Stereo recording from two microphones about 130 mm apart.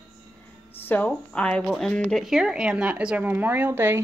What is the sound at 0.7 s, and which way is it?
A woman's voice, 15° left (ahead or behind).